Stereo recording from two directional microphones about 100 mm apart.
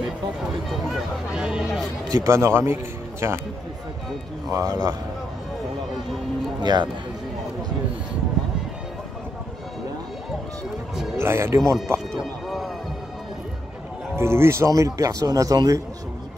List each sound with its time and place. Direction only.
0.7 s a sound: centre (ahead or behind)
2.0 s a man's voice: 35° right (ahead or behind)
4.5 s speech: 35° right (ahead or behind)
6.6 s speech: 45° right (ahead or behind)
11.1 s speech: 25° right (ahead or behind)
12.2 s music: centre (ahead or behind)
14.1 s speech: 25° right (ahead or behind)